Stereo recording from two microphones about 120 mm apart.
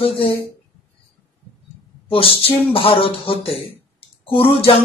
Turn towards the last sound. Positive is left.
turn(degrees=45)  # may be behind; listen again after turning